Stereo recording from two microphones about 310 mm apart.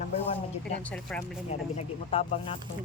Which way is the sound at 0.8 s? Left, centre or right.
Centre.